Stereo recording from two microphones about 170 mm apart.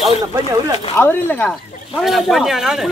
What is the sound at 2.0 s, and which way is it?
Speech, centre (ahead or behind).